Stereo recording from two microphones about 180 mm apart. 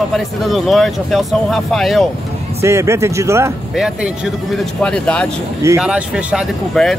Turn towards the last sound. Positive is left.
turn(degrees=0)  # may be behind; listen again after turning